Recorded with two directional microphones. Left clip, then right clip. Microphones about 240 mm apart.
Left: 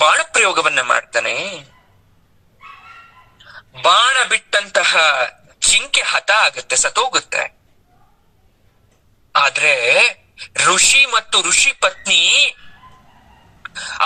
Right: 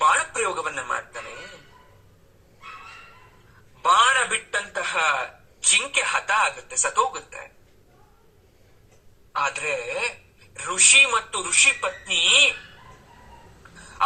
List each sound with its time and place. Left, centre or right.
0.0 s a man's voice: left
3.5 s a man's voice: left
9.3 s a man's voice: left